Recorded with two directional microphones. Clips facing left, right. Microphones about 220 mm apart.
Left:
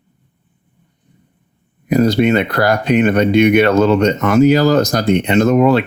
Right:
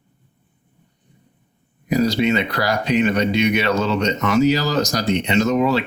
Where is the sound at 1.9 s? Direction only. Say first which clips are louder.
Left 5 dB; 55° left (ahead or behind).